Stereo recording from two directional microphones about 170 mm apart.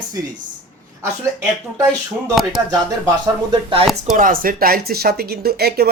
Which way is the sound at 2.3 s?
Centre (ahead or behind).